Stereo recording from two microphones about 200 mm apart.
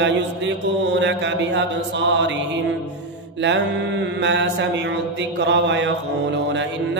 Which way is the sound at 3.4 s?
65° right (ahead or behind).